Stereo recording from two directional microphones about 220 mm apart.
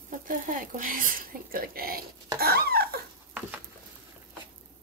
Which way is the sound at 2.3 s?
45° right (ahead or behind).